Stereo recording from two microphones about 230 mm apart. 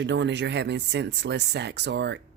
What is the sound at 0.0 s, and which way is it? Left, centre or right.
Speech, right.